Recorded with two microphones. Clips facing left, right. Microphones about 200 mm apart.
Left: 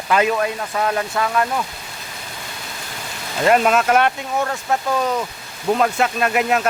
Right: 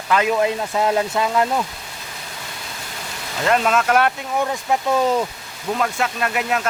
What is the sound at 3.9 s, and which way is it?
Speech, 5° right (ahead or behind).